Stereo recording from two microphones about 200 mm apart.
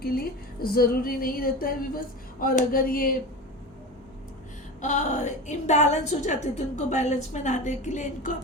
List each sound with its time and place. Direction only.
0.0 s a woman's voice: 50° left (ahead or behind)
4.8 s a woman's voice: 35° left (ahead or behind)